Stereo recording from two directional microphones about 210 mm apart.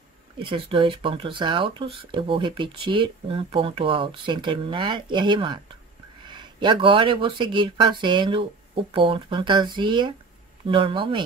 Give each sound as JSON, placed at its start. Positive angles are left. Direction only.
{"t": 0.4, "sound": "speech", "side_deg": -25}